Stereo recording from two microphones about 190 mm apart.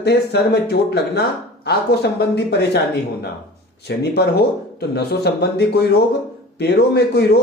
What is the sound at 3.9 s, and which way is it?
Speech, 65° left (ahead or behind).